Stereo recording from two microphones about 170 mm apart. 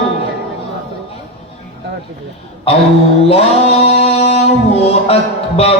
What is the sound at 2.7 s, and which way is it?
Speech, 35° left (ahead or behind).